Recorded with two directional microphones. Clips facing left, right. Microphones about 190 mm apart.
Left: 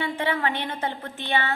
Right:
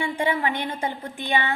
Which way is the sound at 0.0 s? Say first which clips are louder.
Right 2 dB; 15° right (ahead or behind).